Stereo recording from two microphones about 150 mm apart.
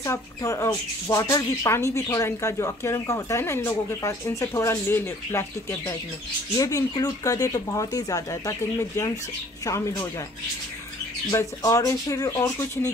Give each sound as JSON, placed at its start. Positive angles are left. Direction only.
{"t": 0.0, "sound": "speech", "side_deg": 20}
{"t": 11.2, "sound": "speech", "side_deg": 20}